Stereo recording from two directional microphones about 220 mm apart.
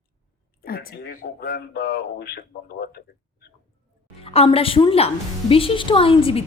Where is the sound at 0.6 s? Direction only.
40° left (ahead or behind).